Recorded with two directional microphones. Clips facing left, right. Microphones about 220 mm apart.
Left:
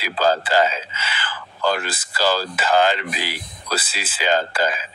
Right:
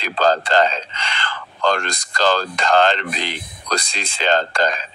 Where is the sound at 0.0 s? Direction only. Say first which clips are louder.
Right 2 dB; 10° left (ahead or behind).